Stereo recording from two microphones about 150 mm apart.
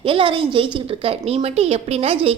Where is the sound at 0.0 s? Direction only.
35° right (ahead or behind).